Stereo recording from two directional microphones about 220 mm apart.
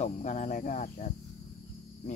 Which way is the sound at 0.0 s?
30° left (ahead or behind).